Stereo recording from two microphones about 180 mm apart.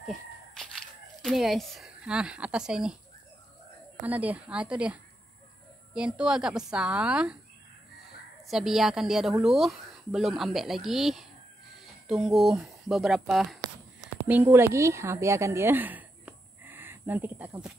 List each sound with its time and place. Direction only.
0.6 s speech: centre (ahead or behind)
4.0 s speech: 10° right (ahead or behind)
8.5 s a woman's voice: centre (ahead or behind)